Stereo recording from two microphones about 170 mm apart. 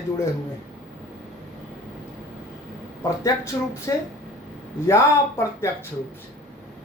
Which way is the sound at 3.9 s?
20° left (ahead or behind).